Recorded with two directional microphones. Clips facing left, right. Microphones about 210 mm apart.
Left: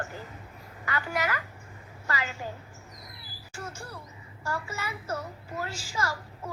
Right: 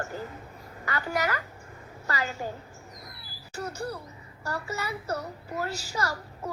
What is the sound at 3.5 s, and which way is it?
A child's voice, 40° right (ahead or behind).